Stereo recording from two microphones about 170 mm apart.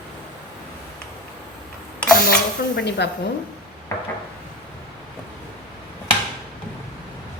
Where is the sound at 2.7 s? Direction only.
85° left.